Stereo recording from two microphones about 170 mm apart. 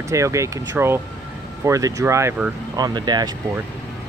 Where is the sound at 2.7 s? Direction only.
25° right (ahead or behind).